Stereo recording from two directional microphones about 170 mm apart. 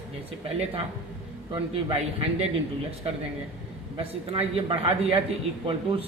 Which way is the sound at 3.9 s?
35° right (ahead or behind).